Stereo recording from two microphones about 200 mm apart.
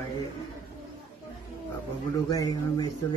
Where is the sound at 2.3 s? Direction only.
20° left (ahead or behind).